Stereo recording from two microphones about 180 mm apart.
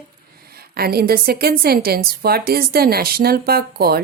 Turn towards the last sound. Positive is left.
turn(degrees=-60)  # may be behind; listen again after turning